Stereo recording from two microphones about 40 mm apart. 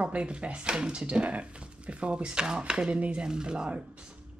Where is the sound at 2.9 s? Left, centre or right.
Right.